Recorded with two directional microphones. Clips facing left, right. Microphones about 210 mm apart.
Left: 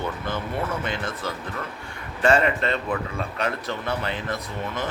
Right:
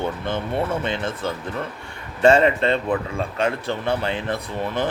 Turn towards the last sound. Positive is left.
turn(degrees=-30)  # may be behind; listen again after turning